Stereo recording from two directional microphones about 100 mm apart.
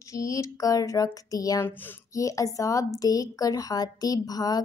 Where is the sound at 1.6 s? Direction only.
20° left (ahead or behind).